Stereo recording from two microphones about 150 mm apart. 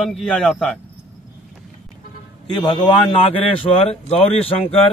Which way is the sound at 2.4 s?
30° left (ahead or behind).